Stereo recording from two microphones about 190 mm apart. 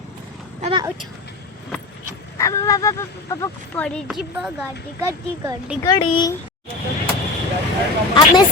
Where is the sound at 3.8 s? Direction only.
5° left (ahead or behind).